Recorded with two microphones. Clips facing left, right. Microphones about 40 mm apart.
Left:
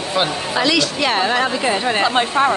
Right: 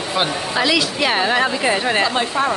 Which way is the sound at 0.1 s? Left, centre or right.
Centre.